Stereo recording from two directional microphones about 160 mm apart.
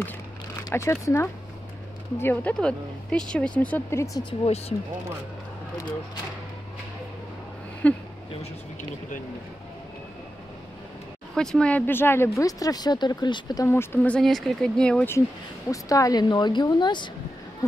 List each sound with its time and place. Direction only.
0.7 s speech: 20° left (ahead or behind)
4.3 s speech: 40° left (ahead or behind)
7.8 s speech: 10° left (ahead or behind)
11.3 s speech: 5° left (ahead or behind); by 13.7 s 25° left (ahead or behind)
13.7 s speech: 10° left (ahead or behind)
15.7 s speech: 20° left (ahead or behind)